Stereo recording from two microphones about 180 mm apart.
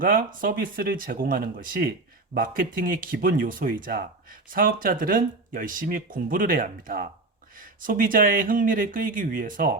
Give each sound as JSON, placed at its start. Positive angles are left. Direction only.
{"t": 0.0, "sound": "speech", "side_deg": -50}